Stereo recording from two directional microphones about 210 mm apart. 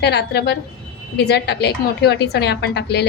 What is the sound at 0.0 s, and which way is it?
A woman's voice, 50° left (ahead or behind).